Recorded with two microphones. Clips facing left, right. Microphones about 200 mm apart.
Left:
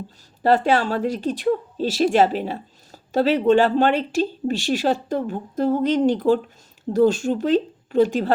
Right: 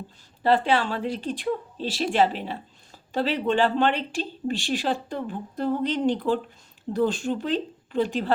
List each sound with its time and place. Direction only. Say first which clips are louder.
0.4 s speech: left 4 dB; 45° left (ahead or behind)